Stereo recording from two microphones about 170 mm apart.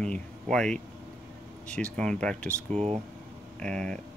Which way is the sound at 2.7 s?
40° right (ahead or behind).